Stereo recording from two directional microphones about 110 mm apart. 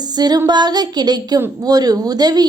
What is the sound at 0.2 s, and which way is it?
Speech, 40° right (ahead or behind).